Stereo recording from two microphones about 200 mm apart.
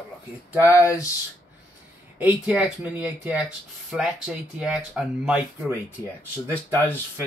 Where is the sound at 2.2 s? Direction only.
5° right (ahead or behind).